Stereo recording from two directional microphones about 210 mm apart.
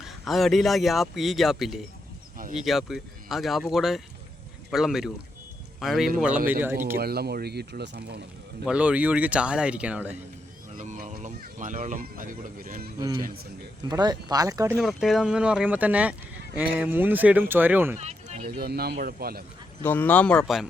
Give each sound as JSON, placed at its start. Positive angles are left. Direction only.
{"t": 0.0, "sound": "speech", "side_deg": 0}
{"t": 7.0, "sound": "speech", "side_deg": -50}
{"t": 8.6, "sound": "speech", "side_deg": -5}
{"t": 10.8, "sound": "speech", "side_deg": -35}
{"t": 13.8, "sound": "speech", "side_deg": -20}
{"t": 14.8, "sound": "speech", "side_deg": 0}
{"t": 18.0, "sound": "a sound", "side_deg": -30}
{"t": 18.4, "sound": "speech", "side_deg": -50}
{"t": 19.8, "sound": "speech", "side_deg": 10}